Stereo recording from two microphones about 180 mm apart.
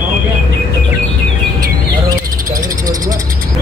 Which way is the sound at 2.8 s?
20° right (ahead or behind).